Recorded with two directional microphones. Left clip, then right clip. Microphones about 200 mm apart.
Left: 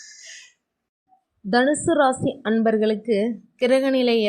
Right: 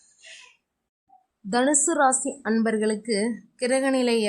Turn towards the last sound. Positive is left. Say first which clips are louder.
# left 3 dB
turn(degrees=5)  # may be behind; listen again after turning